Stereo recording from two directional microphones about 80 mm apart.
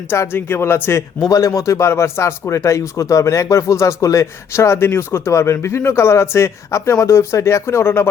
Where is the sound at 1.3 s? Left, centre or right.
Left.